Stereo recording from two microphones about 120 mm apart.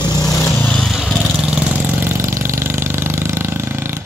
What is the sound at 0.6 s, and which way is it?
Vehicle, 15° left (ahead or behind).